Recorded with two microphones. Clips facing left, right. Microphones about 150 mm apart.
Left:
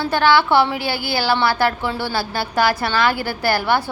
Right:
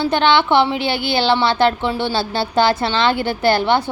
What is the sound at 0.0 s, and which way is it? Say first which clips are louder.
A woman's voice: right 1 dB; 20° right (ahead or behind).